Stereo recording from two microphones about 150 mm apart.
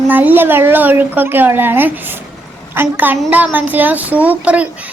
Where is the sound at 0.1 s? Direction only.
10° right (ahead or behind).